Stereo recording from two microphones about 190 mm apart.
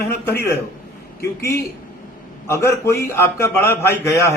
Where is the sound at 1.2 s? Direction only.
15° left (ahead or behind).